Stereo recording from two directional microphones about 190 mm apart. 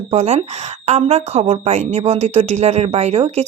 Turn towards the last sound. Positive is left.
turn(degrees=-35)  # may be behind; listen again after turning